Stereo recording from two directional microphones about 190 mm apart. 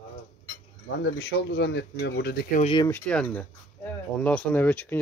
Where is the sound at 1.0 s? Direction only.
65° left (ahead or behind).